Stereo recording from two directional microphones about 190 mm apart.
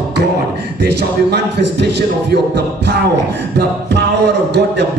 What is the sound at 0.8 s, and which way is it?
A man's voice, 60° right (ahead or behind).